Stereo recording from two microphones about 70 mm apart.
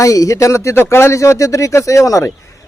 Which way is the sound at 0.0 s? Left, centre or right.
Left.